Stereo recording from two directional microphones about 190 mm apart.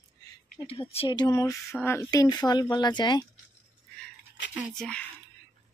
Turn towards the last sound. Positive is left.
turn(degrees=5)  # may be behind; listen again after turning